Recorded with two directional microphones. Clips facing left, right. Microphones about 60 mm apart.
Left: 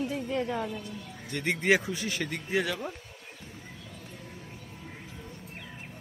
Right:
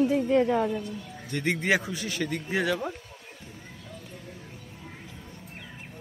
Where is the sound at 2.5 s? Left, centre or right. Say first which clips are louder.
Right 2 dB; centre.